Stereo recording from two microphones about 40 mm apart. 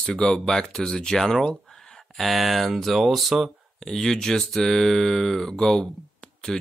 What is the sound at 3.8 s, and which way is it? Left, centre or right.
Speech, centre.